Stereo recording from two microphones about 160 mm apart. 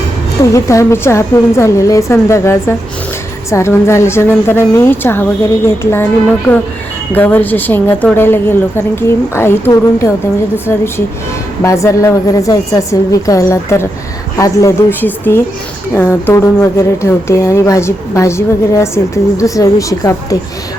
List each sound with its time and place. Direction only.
0.5 s speech: 20° left (ahead or behind)
7.1 s a woman's voice: 10° left (ahead or behind)